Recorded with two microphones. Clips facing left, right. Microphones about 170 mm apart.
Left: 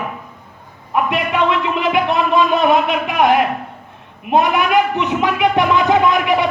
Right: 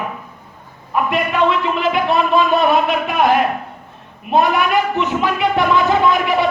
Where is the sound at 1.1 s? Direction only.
20° left (ahead or behind).